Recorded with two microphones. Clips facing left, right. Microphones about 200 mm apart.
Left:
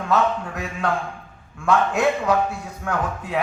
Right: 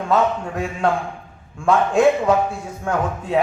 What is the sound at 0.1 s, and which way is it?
A man's voice, 25° right (ahead or behind).